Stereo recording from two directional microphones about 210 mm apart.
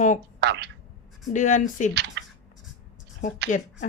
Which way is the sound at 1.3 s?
35° left (ahead or behind).